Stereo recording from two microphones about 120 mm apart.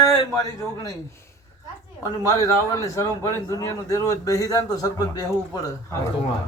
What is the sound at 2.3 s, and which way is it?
A man's voice, 25° left (ahead or behind).